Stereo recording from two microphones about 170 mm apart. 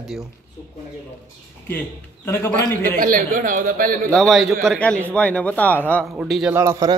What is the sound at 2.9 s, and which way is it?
A man's voice, 55° right (ahead or behind).